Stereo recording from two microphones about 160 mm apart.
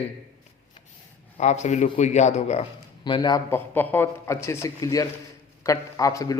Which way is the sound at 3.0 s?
25° left (ahead or behind).